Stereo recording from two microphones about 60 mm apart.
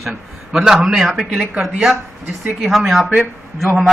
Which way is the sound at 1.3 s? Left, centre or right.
Centre.